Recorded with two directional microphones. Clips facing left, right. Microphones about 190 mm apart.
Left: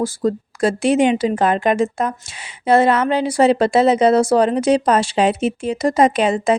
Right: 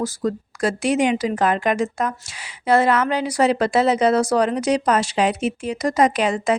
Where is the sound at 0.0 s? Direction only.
30° left (ahead or behind).